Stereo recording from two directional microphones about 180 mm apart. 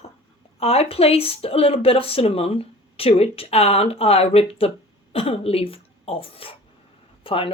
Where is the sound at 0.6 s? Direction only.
35° left (ahead or behind).